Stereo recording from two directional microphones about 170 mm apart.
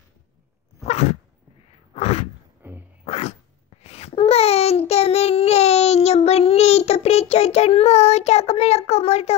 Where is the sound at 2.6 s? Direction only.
10° right (ahead or behind).